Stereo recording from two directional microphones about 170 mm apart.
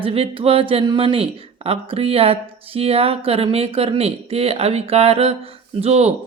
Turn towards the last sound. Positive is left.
turn(degrees=-40)  # may be behind; listen again after turning